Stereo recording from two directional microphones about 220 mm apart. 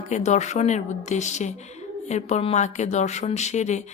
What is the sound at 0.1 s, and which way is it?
Speech, 30° left (ahead or behind).